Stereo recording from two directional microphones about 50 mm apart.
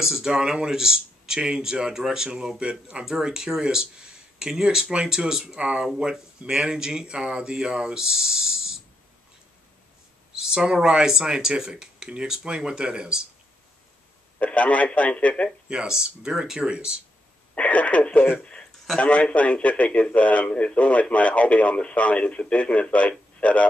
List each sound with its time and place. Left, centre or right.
0.0 s speech: centre
10.3 s speech: centre
14.4 s speech: left
15.7 s speech: centre
17.6 s radio: left
18.4 s a sound: left
18.9 s speech: left